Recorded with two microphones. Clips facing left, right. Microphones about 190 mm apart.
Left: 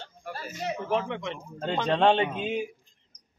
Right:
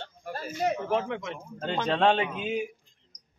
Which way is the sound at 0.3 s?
50° right (ahead or behind).